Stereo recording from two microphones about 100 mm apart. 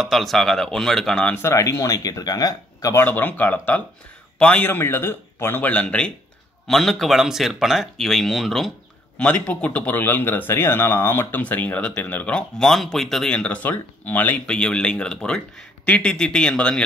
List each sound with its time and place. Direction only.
0.0 s speech: centre (ahead or behind)
1.3 s speech: 25° left (ahead or behind)
3.0 s speech: 20° left (ahead or behind)
6.7 s speech: centre (ahead or behind)
9.2 s speech: 15° left (ahead or behind)